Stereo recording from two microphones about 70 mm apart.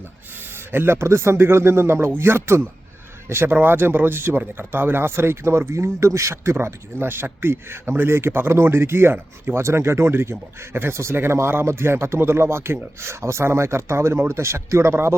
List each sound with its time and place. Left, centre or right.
0.7 s speech: right